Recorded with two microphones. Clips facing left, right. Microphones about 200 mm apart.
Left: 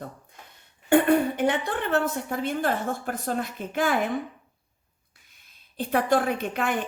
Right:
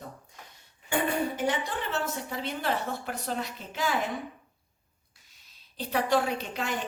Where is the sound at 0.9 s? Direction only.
60° left (ahead or behind).